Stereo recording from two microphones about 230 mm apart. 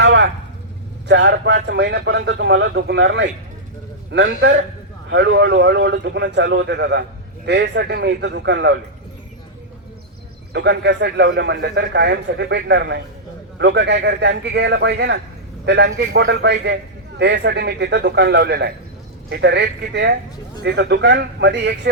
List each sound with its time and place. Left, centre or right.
0.0 s vehicle: right
1.0 s a man's voice: right
10.5 s a man's voice: right